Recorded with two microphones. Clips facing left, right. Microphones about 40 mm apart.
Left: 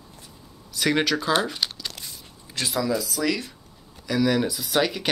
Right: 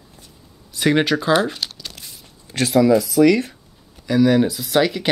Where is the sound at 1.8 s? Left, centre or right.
Centre.